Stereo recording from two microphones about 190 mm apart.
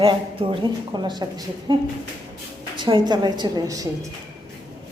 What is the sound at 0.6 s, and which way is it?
A woman's voice, 25° right (ahead or behind).